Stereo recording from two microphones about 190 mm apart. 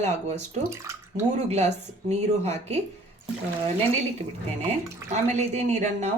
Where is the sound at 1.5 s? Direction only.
35° right (ahead or behind).